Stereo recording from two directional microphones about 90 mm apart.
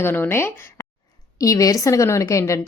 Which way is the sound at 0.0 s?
25° left (ahead or behind).